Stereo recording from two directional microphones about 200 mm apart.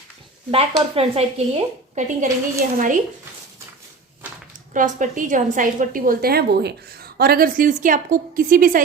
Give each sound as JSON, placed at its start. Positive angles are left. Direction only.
{"t": 0.5, "sound": "speech", "side_deg": -30}
{"t": 4.7, "sound": "a woman's voice", "side_deg": -40}